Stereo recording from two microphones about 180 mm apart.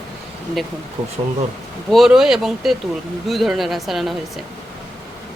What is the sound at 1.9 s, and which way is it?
A woman's voice, centre (ahead or behind).